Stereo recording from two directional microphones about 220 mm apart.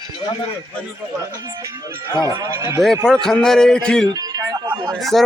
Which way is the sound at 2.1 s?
15° left (ahead or behind).